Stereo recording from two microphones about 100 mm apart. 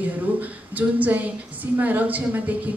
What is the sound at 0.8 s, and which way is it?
A woman's voice, 15° right (ahead or behind).